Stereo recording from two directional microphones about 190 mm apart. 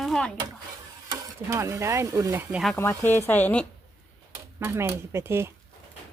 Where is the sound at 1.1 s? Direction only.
15° right (ahead or behind).